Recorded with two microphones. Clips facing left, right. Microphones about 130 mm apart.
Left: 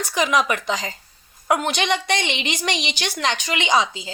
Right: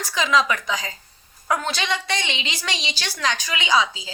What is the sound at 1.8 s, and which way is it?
Speech, 60° left (ahead or behind).